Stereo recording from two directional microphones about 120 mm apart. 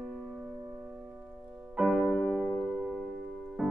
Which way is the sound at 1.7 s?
5° right (ahead or behind).